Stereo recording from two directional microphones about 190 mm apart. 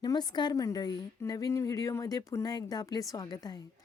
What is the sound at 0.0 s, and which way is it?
A woman's voice, 20° left (ahead or behind).